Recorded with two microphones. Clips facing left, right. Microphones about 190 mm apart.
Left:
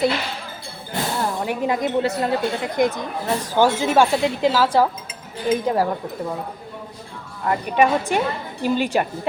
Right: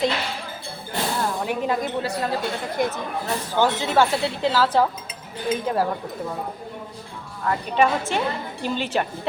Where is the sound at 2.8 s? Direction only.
15° left (ahead or behind).